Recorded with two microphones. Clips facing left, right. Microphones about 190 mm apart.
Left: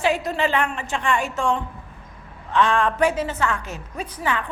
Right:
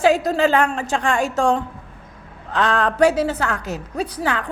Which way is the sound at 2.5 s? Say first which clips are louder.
Even; 40° right (ahead or behind).